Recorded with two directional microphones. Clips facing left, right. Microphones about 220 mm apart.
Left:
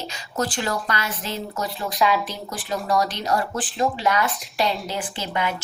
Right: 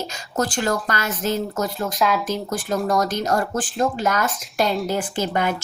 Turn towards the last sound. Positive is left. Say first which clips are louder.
# right 4 dB
turn(degrees=-45)  # may be behind; listen again after turning